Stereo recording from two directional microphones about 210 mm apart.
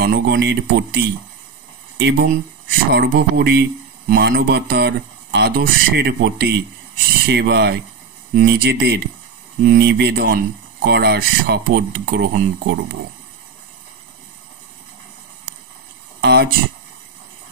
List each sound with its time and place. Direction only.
0.0 s speech: 50° right (ahead or behind)
16.2 s speech: 50° right (ahead or behind)